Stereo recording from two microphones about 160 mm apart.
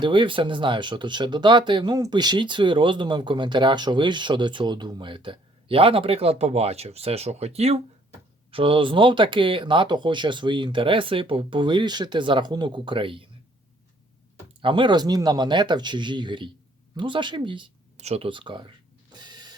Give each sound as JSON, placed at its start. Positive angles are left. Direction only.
{"t": 0.0, "sound": "speech", "side_deg": -30}
{"t": 14.6, "sound": "speech", "side_deg": -30}
{"t": 17.9, "sound": "speech", "side_deg": -40}
{"t": 19.1, "sound": "printer", "side_deg": -25}